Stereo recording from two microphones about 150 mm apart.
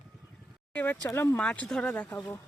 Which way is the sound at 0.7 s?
10° left (ahead or behind).